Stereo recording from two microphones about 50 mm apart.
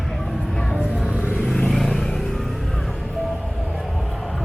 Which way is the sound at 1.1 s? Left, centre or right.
Right.